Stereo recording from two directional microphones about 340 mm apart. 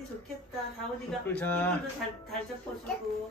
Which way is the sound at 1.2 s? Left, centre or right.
Centre.